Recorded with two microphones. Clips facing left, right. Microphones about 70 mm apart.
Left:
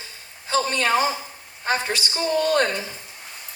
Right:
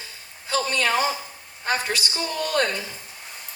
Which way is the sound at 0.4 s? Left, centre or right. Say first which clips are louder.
Left 2 dB; left.